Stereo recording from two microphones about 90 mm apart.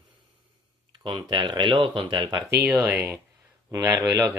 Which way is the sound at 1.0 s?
70° right (ahead or behind).